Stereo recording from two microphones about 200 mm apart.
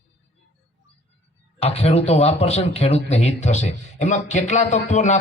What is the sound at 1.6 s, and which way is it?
Speech, 30° left (ahead or behind).